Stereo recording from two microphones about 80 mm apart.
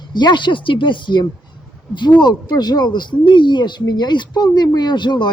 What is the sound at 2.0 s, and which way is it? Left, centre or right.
Speech, left.